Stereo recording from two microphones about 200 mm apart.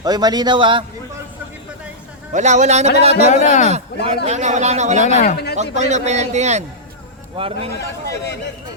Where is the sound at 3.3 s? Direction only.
40° left (ahead or behind).